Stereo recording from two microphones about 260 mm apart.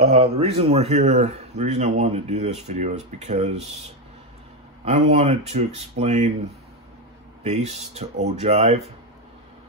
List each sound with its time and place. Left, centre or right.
0.0 s speech: right
4.8 s speech: right
7.4 s speech: right